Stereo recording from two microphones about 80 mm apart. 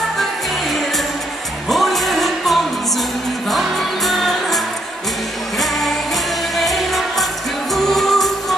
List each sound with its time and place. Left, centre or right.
0.7 s music: centre